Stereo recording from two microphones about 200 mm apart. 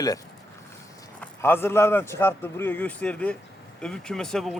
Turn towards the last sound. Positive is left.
turn(degrees=0)  # may be behind; listen again after turning